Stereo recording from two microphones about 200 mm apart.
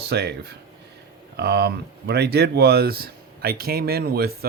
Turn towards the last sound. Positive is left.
turn(degrees=-50)  # may be behind; listen again after turning